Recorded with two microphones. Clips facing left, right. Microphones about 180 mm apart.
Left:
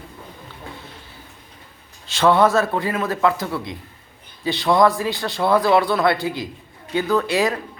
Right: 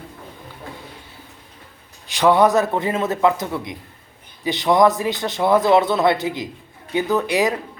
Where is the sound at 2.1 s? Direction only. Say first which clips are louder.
Right 1 dB; 15° right (ahead or behind).